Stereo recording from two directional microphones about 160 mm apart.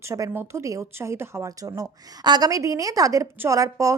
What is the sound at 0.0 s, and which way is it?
A woman's voice, 20° right (ahead or behind).